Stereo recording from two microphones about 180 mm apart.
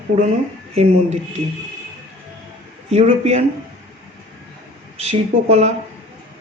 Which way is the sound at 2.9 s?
35° right (ahead or behind).